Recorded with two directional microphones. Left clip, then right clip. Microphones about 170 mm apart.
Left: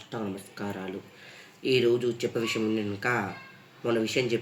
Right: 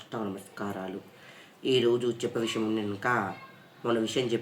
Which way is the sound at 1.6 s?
5° right (ahead or behind).